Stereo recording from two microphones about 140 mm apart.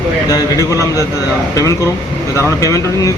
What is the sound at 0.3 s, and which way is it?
Speech, 25° left (ahead or behind).